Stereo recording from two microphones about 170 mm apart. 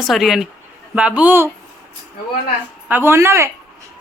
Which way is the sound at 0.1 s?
Centre (ahead or behind).